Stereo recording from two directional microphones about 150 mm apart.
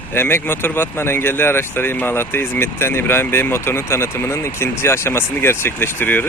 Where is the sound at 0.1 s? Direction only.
15° left (ahead or behind).